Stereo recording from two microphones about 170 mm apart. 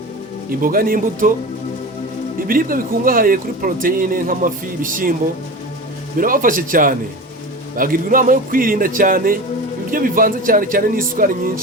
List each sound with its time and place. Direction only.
0.6 s speech: 55° right (ahead or behind)
2.5 s speech: 55° right (ahead or behind)
6.1 s a man's voice: 55° right (ahead or behind)